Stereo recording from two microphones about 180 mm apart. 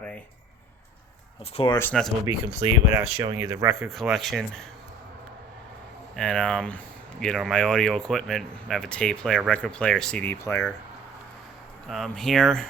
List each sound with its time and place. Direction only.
1.5 s speech: 25° left (ahead or behind)
1.8 s speech: 5° left (ahead or behind)
2.2 s speech: 20° right (ahead or behind)
3.8 s speech: centre (ahead or behind)
6.1 s speech: 5° left (ahead or behind)
11.9 s speech: centre (ahead or behind)